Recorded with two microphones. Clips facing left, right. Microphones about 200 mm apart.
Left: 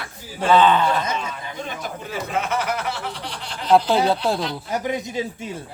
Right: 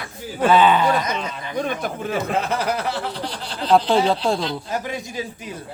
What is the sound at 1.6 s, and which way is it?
Speech, 55° right (ahead or behind).